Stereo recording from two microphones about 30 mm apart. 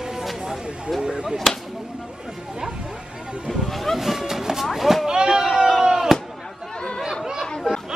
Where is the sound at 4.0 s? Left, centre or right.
Centre.